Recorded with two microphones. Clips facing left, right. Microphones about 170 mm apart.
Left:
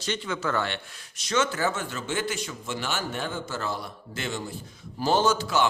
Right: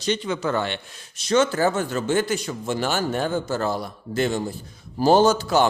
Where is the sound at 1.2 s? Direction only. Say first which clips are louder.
Right 6 dB; 35° right (ahead or behind).